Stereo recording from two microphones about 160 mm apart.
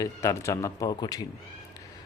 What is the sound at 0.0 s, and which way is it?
Speech, 20° left (ahead or behind).